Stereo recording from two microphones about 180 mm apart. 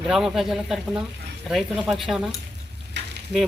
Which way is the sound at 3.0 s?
75° right (ahead or behind).